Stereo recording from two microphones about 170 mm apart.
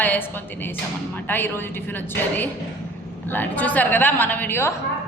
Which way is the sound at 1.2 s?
10° left (ahead or behind).